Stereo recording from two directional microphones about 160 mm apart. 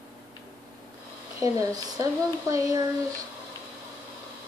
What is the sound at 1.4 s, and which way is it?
A woman's voice, 20° right (ahead or behind).